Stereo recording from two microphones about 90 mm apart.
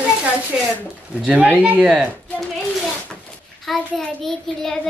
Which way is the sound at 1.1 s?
10° right (ahead or behind).